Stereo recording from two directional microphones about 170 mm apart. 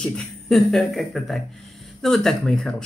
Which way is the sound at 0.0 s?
5° left (ahead or behind).